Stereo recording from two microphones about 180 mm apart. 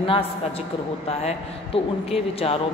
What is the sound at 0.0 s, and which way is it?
Speech, 30° left (ahead or behind).